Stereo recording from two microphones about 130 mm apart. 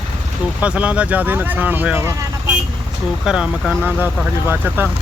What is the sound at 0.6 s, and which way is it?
Speech, 10° right (ahead or behind).